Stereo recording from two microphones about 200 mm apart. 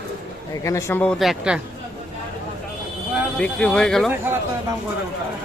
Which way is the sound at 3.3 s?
5° left (ahead or behind).